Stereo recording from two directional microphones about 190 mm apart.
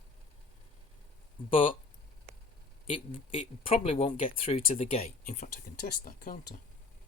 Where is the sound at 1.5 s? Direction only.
30° left (ahead or behind).